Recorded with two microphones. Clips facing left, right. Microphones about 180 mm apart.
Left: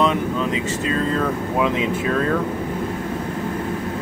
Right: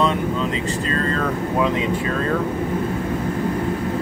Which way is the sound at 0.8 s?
5° left (ahead or behind).